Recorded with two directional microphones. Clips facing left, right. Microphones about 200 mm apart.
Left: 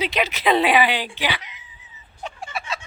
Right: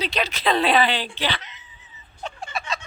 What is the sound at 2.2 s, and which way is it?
Fowl, 10° left (ahead or behind).